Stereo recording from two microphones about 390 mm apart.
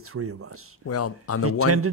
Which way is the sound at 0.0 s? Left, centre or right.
Right.